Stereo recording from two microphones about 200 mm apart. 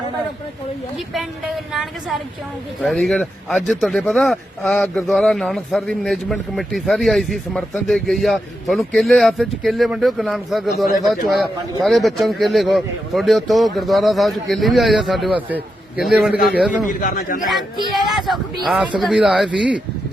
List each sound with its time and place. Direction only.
0.9 s a man's voice: centre (ahead or behind)
17.0 s a man's voice: 45° left (ahead or behind)
17.4 s a man's voice: centre (ahead or behind)